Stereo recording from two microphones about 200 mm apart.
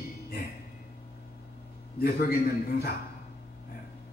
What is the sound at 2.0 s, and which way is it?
Speech, 50° left (ahead or behind).